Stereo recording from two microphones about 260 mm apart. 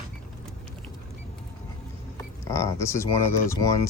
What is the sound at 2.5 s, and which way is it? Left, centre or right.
Speech, centre.